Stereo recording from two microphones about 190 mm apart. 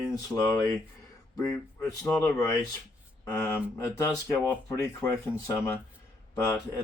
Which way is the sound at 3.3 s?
15° left (ahead or behind).